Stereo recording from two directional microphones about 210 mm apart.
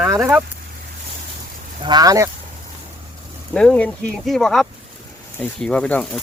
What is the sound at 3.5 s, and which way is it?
Speech, 5° left (ahead or behind).